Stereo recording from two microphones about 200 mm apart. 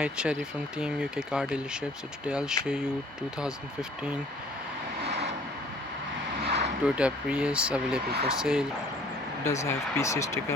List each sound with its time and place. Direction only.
0.0 s speech: 5° right (ahead or behind)
6.4 s a sound: 55° right (ahead or behind)
6.8 s speech: 5° right (ahead or behind)
8.0 s speech: 50° right (ahead or behind)
8.4 s speech: 5° right (ahead or behind)
9.4 s speech: 15° left (ahead or behind)